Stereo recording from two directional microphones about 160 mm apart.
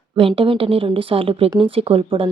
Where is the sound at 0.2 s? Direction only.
35° right (ahead or behind).